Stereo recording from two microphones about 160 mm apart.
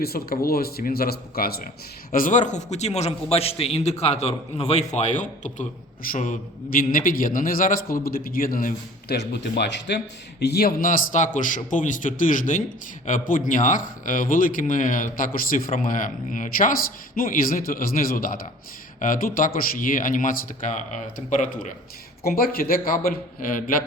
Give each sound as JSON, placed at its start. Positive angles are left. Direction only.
{"t": 0.0, "sound": "speech", "side_deg": 70}
{"t": 2.1, "sound": "a man's voice", "side_deg": 55}
{"t": 10.4, "sound": "a man's voice", "side_deg": 80}
{"t": 22.2, "sound": "speech", "side_deg": 65}